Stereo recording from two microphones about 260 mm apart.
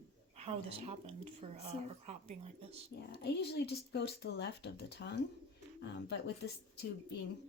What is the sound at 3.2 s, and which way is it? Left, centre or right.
A woman's voice, left.